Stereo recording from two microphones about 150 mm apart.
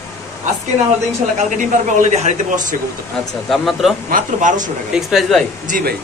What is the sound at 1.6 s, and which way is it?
Speech, 55° right (ahead or behind).